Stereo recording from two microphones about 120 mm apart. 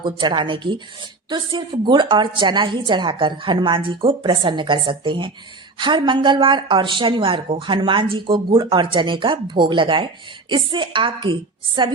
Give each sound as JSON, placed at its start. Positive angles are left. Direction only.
{"t": 0.0, "sound": "speech", "side_deg": -40}